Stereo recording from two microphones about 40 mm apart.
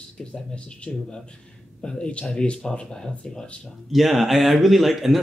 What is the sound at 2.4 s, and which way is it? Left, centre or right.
Speech, left.